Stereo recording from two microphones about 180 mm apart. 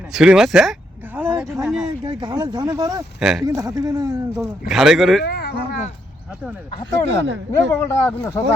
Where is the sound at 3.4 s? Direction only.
15° right (ahead or behind).